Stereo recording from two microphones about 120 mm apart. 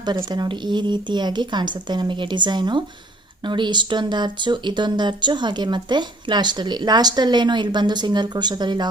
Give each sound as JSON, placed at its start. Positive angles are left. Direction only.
{"t": 0.3, "sound": "speech", "side_deg": -35}